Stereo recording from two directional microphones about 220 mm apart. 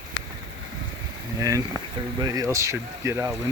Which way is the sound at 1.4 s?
15° right (ahead or behind).